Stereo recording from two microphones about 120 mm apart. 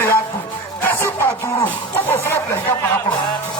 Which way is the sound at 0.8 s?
20° left (ahead or behind).